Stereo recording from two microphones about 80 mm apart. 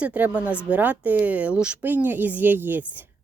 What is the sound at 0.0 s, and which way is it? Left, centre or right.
A woman's voice, centre.